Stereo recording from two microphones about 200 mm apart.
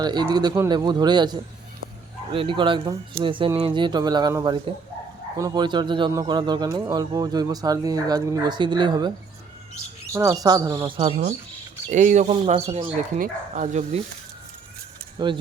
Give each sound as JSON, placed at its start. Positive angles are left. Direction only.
{"t": 0.0, "sound": "speech", "side_deg": -20}
{"t": 15.2, "sound": "speech", "side_deg": -20}